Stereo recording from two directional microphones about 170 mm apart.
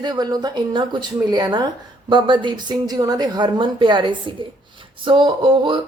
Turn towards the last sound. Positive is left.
turn(degrees=-30)  # may be behind; listen again after turning